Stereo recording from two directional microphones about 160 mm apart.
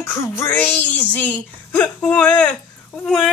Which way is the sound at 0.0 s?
15° left (ahead or behind).